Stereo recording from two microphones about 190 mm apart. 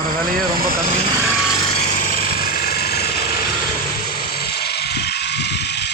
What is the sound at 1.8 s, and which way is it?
Jackhammer, 45° left (ahead or behind).